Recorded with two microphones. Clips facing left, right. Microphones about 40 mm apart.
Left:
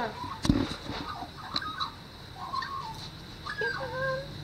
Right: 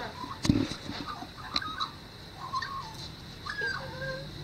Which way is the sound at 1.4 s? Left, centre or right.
Centre.